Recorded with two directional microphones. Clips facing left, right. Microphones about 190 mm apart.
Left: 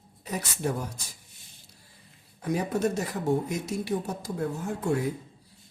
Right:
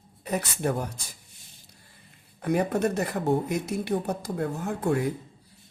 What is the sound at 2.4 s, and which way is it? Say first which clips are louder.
Speech: right 2 dB; 60° right (ahead or behind).